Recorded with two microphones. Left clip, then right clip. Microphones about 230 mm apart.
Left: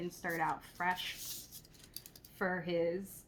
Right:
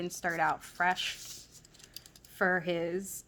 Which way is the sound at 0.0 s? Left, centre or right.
Right.